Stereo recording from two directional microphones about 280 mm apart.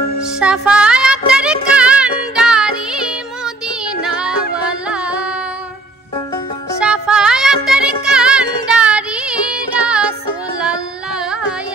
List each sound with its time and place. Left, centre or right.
0.4 s music: centre
6.8 s music: centre
10.6 s carnatic music: centre